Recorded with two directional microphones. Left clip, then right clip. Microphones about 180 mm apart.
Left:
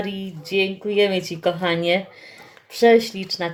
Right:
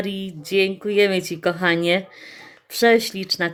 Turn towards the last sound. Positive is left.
turn(degrees=-35)  # may be behind; listen again after turning